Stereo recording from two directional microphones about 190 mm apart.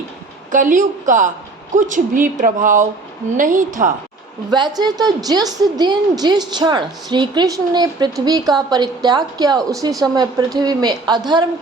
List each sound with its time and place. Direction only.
0.5 s speech: 45° right (ahead or behind)
4.5 s a woman's voice: 25° right (ahead or behind)